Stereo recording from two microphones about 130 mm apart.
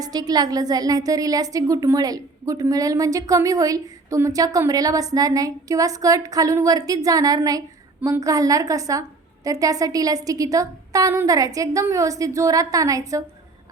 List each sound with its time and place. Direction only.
0.0 s a woman's voice: 30° right (ahead or behind)